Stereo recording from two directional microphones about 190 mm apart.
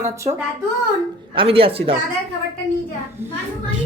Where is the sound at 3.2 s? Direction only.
10° right (ahead or behind).